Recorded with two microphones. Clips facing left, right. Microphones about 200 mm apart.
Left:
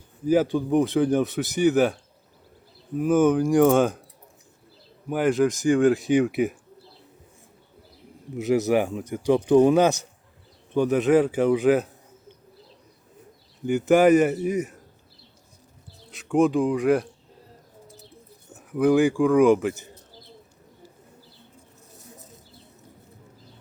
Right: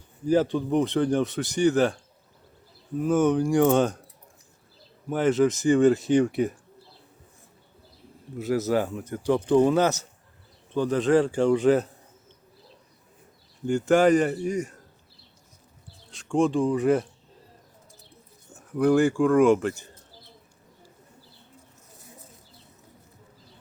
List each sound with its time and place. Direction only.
0.3 s speech: 5° left (ahead or behind)
3.0 s speech: centre (ahead or behind)
5.0 s speech: 10° left (ahead or behind)
5.5 s speech: centre (ahead or behind)
8.4 s speech: 15° left (ahead or behind)
13.7 s speech: 5° left (ahead or behind)
16.1 s speech: 5° left (ahead or behind)
18.7 s speech: centre (ahead or behind)